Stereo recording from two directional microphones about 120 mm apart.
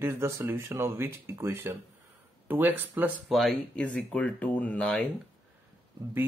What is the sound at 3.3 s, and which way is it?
Speech, centre (ahead or behind).